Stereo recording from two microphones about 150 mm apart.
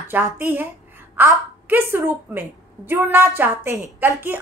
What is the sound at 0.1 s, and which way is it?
A woman's voice, 15° right (ahead or behind).